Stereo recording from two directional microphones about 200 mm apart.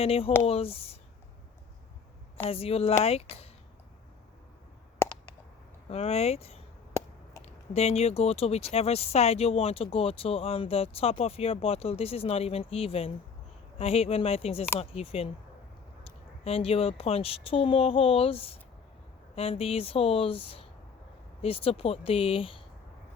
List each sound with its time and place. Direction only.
0.0 s speech: 30° left (ahead or behind)
2.5 s speech: 30° left (ahead or behind)
5.0 s a sound: 15° left (ahead or behind)
5.9 s speech: 30° left (ahead or behind)